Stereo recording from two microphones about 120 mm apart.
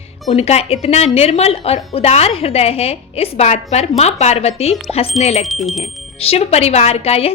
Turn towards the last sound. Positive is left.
turn(degrees=60)  # may be behind; listen again after turning